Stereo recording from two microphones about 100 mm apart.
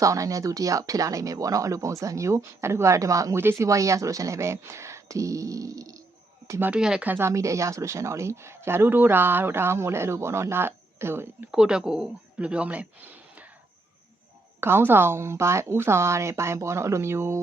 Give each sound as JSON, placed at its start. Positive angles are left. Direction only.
{"t": 0.0, "sound": "speech", "side_deg": -35}
{"t": 6.7, "sound": "speech", "side_deg": -10}
{"t": 7.1, "sound": "speech", "side_deg": -25}
{"t": 11.5, "sound": "speech", "side_deg": -10}
{"t": 14.6, "sound": "speech", "side_deg": -20}